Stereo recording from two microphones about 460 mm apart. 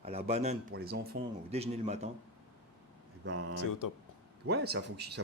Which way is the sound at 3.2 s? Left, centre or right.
Right.